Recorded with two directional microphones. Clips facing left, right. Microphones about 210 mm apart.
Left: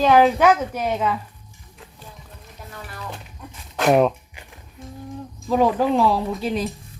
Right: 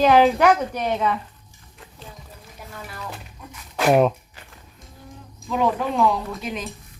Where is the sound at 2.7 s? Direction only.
Centre (ahead or behind).